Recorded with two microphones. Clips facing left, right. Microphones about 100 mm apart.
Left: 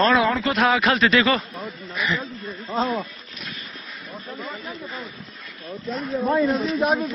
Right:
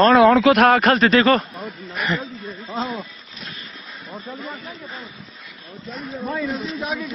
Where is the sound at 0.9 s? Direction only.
40° right (ahead or behind).